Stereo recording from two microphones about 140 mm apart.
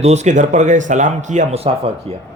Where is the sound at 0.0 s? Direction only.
50° right (ahead or behind).